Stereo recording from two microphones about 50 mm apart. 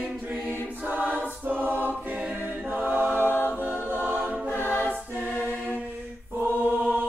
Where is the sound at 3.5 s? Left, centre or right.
Right.